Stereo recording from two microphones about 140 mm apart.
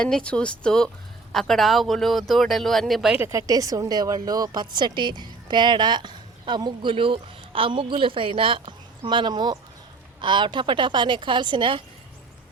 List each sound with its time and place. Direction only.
0.0 s speech: 5° left (ahead or behind)
3.2 s a woman's voice: 20° right (ahead or behind)